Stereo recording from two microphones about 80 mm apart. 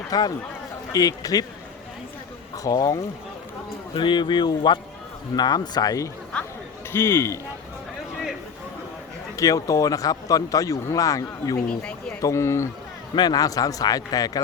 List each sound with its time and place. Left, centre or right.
0.1 s a man's voice: left
2.7 s a man's voice: left
3.9 s a man's voice: left
5.4 s speech: left
6.3 s chatter: centre
6.9 s speech: left
9.3 s a man's voice: left
11.7 s speech: centre
12.2 s speech: left
13.1 s a man's voice: left